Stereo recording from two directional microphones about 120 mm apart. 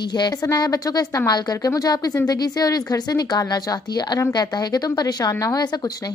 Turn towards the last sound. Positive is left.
turn(degrees=30)  # may be behind; listen again after turning